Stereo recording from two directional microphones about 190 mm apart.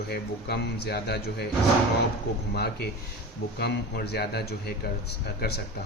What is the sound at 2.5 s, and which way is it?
Speech, 60° left (ahead or behind).